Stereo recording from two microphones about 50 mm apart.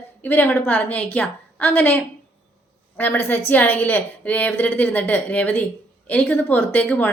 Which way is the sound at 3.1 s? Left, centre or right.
Left.